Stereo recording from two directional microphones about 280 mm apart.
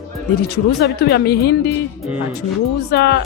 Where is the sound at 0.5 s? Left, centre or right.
Left.